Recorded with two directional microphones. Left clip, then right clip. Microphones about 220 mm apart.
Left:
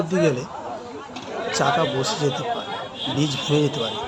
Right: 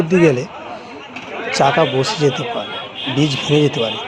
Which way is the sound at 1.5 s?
15° right (ahead or behind).